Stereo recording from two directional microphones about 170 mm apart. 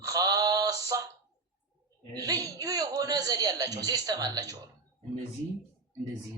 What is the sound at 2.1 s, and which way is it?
A man's voice, 20° right (ahead or behind).